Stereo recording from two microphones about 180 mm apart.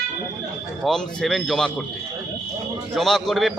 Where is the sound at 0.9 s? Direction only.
Centre (ahead or behind).